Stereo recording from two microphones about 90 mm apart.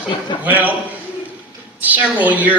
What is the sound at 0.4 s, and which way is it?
Speech, 20° right (ahead or behind).